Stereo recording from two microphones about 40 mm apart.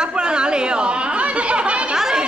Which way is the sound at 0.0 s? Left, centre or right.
Right.